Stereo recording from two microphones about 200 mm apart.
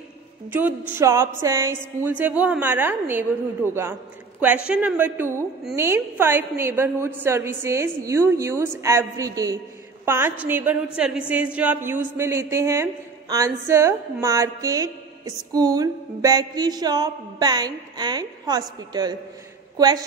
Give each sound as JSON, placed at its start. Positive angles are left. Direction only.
{"t": 0.5, "sound": "a woman's voice", "side_deg": -10}
{"t": 3.6, "sound": "a man's voice", "side_deg": 10}
{"t": 4.6, "sound": "a woman's voice", "side_deg": -5}
{"t": 14.2, "sound": "a sound", "side_deg": -15}